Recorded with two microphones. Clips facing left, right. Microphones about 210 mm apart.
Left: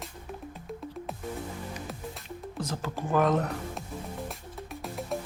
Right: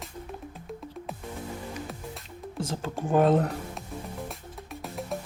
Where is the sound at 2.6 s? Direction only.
30° right (ahead or behind).